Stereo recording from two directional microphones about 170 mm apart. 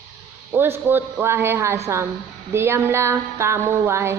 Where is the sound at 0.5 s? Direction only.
10° right (ahead or behind).